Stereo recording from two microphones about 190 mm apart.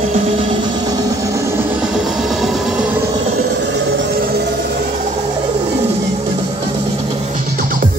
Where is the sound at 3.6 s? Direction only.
60° right (ahead or behind).